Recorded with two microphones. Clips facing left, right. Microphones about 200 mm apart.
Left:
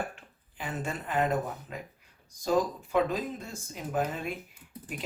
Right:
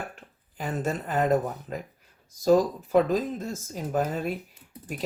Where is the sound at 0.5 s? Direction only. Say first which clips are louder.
Right 6 dB; 40° right (ahead or behind).